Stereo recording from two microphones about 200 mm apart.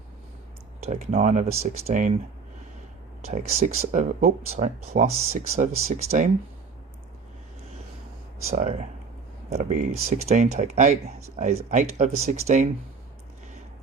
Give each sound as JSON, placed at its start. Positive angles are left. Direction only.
{"t": 0.9, "sound": "speech", "side_deg": -35}
{"t": 3.2, "sound": "speech", "side_deg": -35}
{"t": 8.4, "sound": "speech", "side_deg": -35}